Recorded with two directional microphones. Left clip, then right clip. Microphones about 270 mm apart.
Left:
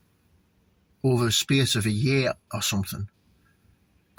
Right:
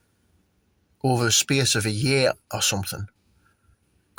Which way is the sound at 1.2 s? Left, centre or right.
Right.